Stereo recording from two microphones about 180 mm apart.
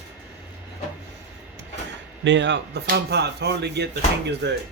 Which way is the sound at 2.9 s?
65° right (ahead or behind).